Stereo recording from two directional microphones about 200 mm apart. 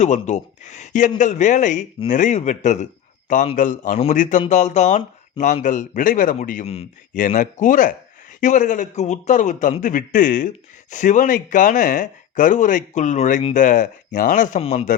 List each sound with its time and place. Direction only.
0.0 s a man's voice: 35° left (ahead or behind)